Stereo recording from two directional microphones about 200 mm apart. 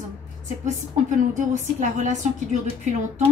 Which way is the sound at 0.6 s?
35° right (ahead or behind).